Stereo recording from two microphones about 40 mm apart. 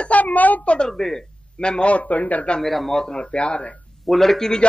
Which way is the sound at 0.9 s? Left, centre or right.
Centre.